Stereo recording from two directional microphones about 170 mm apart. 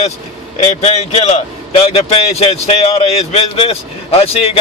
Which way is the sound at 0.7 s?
40° left (ahead or behind).